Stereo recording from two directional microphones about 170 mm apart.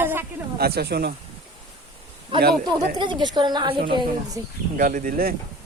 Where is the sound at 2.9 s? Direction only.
25° right (ahead or behind).